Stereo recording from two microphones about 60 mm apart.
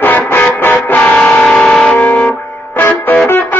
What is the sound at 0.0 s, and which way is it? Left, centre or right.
Music, left.